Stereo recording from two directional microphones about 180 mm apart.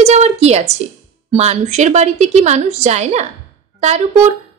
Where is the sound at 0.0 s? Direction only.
40° right (ahead or behind).